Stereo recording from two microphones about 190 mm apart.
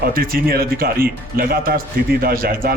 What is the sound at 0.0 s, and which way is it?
A man's voice, 50° right (ahead or behind).